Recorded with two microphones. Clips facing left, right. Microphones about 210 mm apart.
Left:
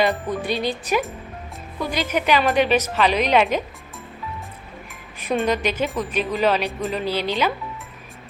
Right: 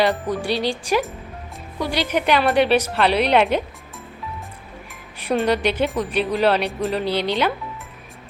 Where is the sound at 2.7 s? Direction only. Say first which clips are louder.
Right 2 dB; 10° right (ahead or behind).